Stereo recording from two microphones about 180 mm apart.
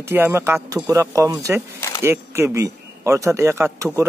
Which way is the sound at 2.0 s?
15° right (ahead or behind).